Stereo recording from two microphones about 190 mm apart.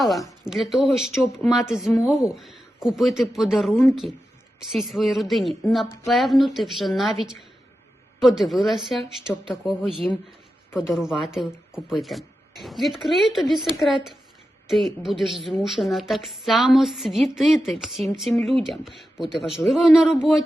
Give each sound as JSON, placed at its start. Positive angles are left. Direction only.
{"t": 0.0, "sound": "a woman's voice", "side_deg": 0}